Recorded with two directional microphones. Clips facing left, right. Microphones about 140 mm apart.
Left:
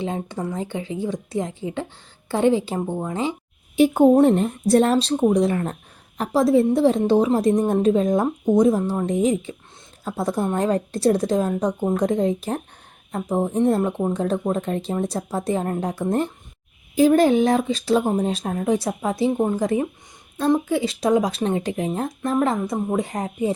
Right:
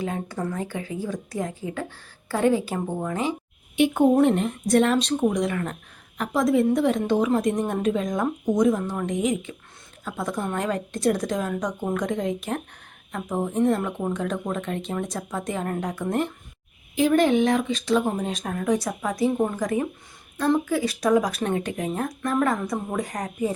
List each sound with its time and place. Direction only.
0.0 s speech: 25° left (ahead or behind)